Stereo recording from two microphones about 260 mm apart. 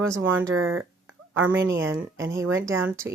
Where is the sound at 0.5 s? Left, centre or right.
Right.